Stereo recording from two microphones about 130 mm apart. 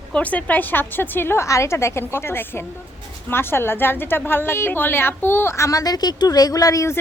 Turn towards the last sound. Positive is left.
turn(degrees=25)  # may be behind; listen again after turning